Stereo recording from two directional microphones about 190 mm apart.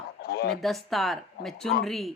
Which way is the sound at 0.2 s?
55° left (ahead or behind).